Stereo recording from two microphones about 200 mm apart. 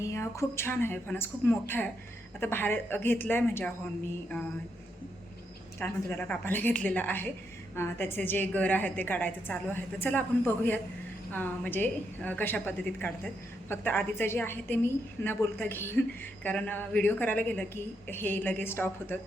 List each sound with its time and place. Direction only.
0.0 s a woman's voice: 15° left (ahead or behind)
5.8 s a woman's voice: 5° left (ahead or behind)